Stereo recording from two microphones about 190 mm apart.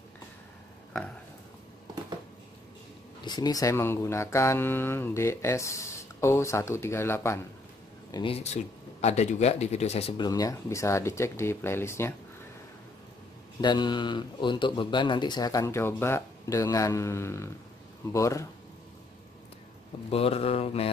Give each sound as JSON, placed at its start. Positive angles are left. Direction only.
{"t": 3.3, "sound": "speech", "side_deg": 20}
{"t": 8.1, "sound": "speech", "side_deg": 30}
{"t": 13.6, "sound": "speech", "side_deg": 25}
{"t": 20.1, "sound": "speech", "side_deg": 30}